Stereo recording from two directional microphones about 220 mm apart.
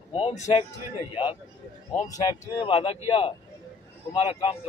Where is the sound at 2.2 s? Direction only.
20° left (ahead or behind).